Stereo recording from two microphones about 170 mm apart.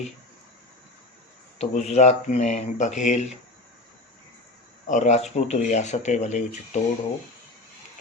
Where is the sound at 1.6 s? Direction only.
40° left (ahead or behind).